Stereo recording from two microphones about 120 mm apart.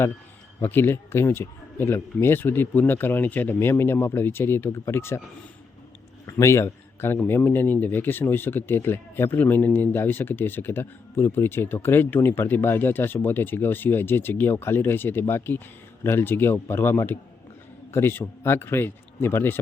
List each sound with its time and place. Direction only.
0.6 s speech: 20° left (ahead or behind)
6.2 s speech: 25° left (ahead or behind)